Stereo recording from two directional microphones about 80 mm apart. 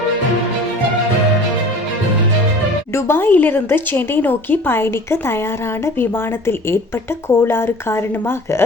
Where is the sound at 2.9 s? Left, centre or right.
Left.